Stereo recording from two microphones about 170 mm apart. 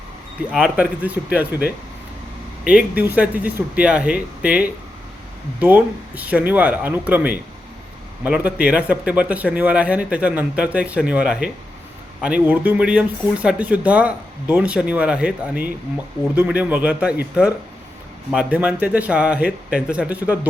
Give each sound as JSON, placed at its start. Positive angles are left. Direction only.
{"t": 0.5, "sound": "speech", "side_deg": -5}
{"t": 18.3, "sound": "speech", "side_deg": -5}